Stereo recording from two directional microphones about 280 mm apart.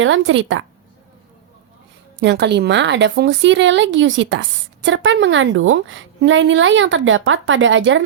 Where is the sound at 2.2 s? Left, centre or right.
Right.